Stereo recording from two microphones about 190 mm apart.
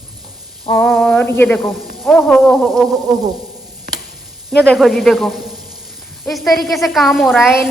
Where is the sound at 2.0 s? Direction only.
5° left (ahead or behind).